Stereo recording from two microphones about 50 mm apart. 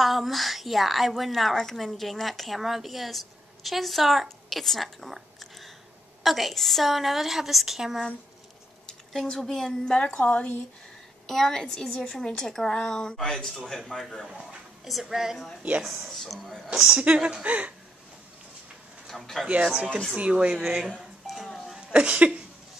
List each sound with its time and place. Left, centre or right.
0.0 s a woman's voice: centre
8.8 s a sound: centre
9.4 s a woman's voice: centre; by 10.5 s left
11.2 s a woman's voice: centre
17.0 s speech: right
19.0 s speech: centre
19.4 s speech: centre
20.5 s speech: centre
21.0 s a sound: centre
21.7 s speech: right